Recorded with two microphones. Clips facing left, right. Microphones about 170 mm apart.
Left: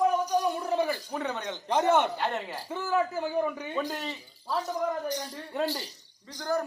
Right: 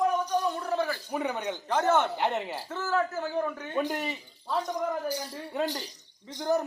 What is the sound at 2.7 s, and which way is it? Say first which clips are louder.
A man's voice: left 1 dB; 15° left (ahead or behind).